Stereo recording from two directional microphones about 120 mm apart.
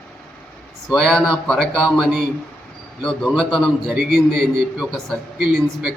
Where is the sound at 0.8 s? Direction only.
5° left (ahead or behind).